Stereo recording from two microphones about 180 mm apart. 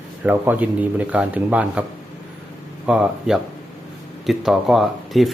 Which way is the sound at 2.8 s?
5° right (ahead or behind).